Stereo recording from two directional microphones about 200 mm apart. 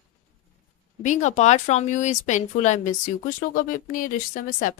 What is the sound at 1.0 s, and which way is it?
Speech, 35° left (ahead or behind).